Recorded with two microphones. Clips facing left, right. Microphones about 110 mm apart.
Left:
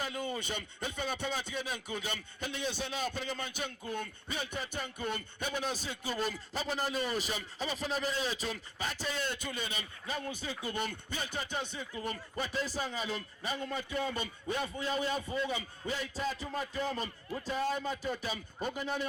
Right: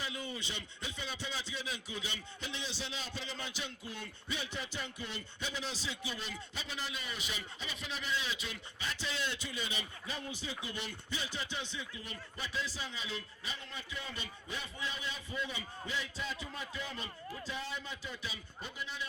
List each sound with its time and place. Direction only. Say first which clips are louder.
0.0 s speech: left 5 dB; 50° left (ahead or behind)